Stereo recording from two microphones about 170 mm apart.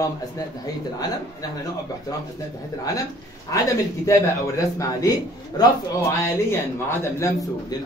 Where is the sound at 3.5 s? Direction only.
20° left (ahead or behind).